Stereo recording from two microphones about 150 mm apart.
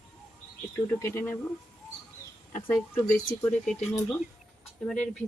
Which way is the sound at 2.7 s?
15° left (ahead or behind).